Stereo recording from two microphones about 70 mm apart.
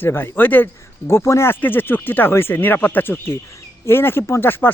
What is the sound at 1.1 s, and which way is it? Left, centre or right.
Speech, left.